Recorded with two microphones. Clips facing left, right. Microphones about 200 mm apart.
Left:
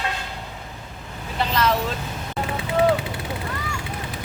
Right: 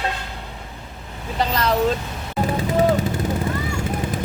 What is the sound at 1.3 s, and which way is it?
Vehicle, 40° right (ahead or behind).